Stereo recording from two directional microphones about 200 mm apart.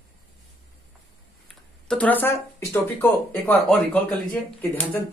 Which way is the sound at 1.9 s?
5° left (ahead or behind).